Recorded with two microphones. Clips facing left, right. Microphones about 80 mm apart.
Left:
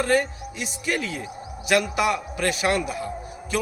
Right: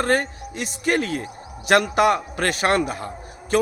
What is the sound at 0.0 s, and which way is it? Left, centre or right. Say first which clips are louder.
A man's voice: right 1 dB; right.